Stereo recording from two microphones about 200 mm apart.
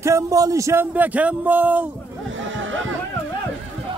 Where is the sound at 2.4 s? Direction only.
75° right (ahead or behind).